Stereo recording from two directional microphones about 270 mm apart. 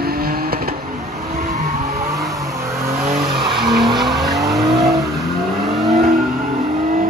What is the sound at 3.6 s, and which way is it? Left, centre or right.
Vehicle, centre.